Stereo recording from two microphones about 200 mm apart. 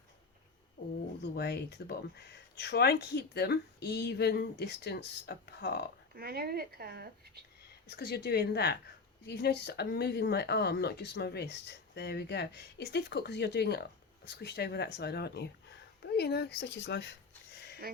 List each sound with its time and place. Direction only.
1.2 s speech: 55° left (ahead or behind)
6.1 s speech: 50° right (ahead or behind)
7.9 s a woman's voice: 55° left (ahead or behind)
17.8 s speech: 50° right (ahead or behind)